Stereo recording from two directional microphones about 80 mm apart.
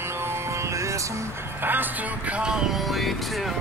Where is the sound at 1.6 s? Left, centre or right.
Right.